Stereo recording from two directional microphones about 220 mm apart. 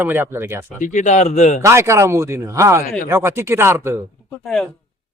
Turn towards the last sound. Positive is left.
turn(degrees=0)  # may be behind; listen again after turning